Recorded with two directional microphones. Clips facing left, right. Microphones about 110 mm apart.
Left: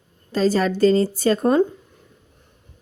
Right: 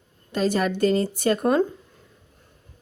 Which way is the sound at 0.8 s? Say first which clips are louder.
Left 5 dB; 30° left (ahead or behind).